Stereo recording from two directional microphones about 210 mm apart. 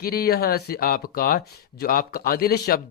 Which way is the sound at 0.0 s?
45° left (ahead or behind).